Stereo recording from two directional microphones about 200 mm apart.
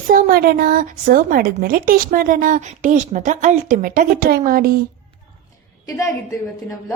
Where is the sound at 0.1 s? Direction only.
45° right (ahead or behind).